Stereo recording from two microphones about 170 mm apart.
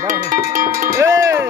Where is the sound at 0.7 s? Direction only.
55° right (ahead or behind).